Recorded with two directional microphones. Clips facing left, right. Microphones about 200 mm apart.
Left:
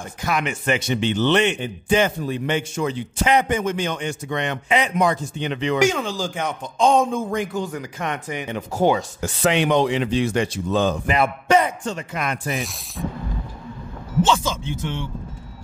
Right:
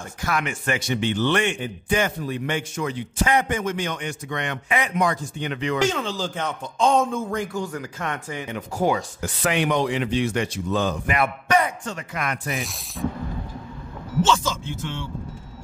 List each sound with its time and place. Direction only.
0.2 s a man's voice: 20° left (ahead or behind)
5.8 s a man's voice: 10° left (ahead or behind); by 12.4 s 25° left (ahead or behind)
12.5 s speech: centre (ahead or behind)